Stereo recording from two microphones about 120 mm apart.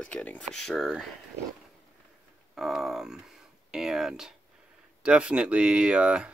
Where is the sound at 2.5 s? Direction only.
Centre (ahead or behind).